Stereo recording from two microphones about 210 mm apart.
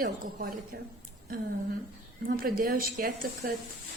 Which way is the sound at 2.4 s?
45° right (ahead or behind).